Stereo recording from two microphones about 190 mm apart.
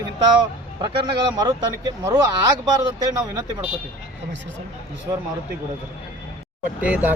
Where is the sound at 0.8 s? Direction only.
25° right (ahead or behind).